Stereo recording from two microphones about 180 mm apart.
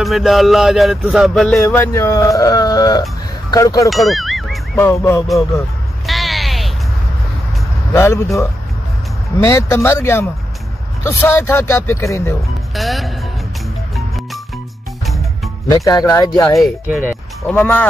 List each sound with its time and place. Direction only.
0.0 s music: centre (ahead or behind)
1.6 s speech: 15° left (ahead or behind)
3.9 s ding: centre (ahead or behind)
4.7 s speech: 15° left (ahead or behind)
6.0 s a sound: centre (ahead or behind)
7.9 s speech: 15° left (ahead or behind)
12.7 s music: centre (ahead or behind)
15.7 s speech: 20° left (ahead or behind)
16.4 s music: centre (ahead or behind)
17.1 s speech: 10° left (ahead or behind)